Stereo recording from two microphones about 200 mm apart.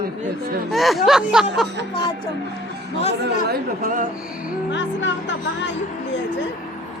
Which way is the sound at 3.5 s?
45° right (ahead or behind).